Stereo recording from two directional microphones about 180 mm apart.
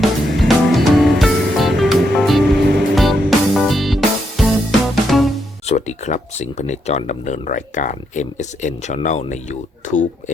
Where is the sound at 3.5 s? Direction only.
Centre (ahead or behind).